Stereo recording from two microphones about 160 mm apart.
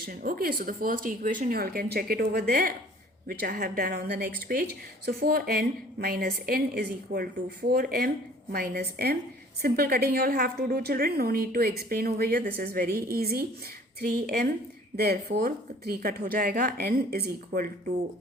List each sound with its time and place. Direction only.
0.0 s a woman's voice: 65° right (ahead or behind)